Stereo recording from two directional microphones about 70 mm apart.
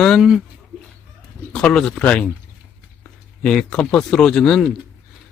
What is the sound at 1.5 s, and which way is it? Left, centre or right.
Speech, centre.